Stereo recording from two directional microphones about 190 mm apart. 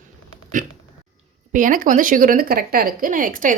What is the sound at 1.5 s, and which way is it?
Speech, 45° right (ahead or behind).